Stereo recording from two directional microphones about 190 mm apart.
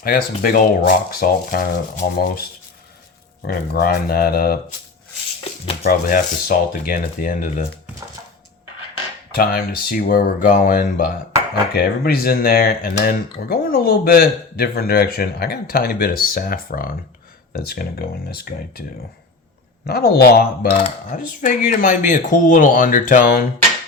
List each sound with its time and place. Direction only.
0.0 s speech: 50° left (ahead or behind)
5.8 s speech: 50° left (ahead or behind)
9.3 s speech: 50° left (ahead or behind)